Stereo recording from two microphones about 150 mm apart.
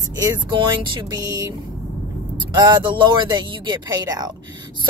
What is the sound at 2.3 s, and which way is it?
Speech, 30° right (ahead or behind).